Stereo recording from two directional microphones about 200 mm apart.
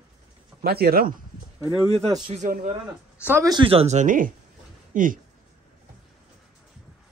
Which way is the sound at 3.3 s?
15° right (ahead or behind).